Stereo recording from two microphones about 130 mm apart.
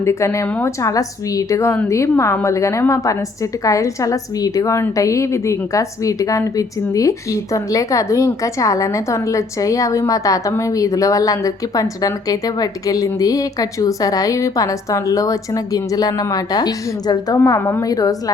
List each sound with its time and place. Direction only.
0.0 s a woman's voice: 20° left (ahead or behind)